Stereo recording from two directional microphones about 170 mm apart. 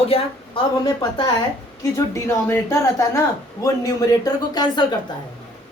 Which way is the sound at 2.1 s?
15° left (ahead or behind).